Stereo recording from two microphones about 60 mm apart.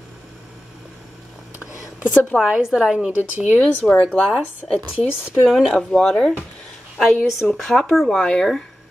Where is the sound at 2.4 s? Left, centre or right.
Centre.